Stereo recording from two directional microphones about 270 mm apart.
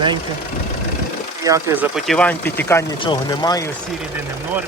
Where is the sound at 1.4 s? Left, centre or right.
Centre.